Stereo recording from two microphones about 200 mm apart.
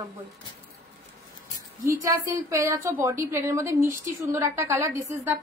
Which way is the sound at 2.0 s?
15° right (ahead or behind).